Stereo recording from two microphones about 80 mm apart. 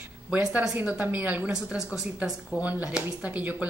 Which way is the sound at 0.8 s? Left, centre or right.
Right.